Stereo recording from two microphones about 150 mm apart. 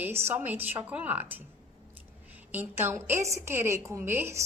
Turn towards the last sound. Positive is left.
turn(degrees=-15)  # may be behind; listen again after turning